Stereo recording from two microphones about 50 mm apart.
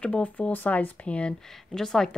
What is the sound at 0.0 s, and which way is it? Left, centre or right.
Speech, left.